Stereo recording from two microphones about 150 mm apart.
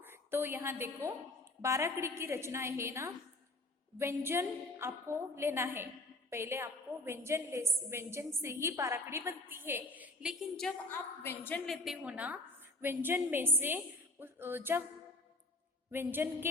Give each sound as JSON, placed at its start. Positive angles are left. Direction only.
{"t": 0.0, "sound": "a woman's voice", "side_deg": -15}
{"t": 11.2, "sound": "a woman's voice", "side_deg": 15}
{"t": 11.6, "sound": "a woman's voice", "side_deg": 0}
{"t": 15.9, "sound": "a woman's voice", "side_deg": -15}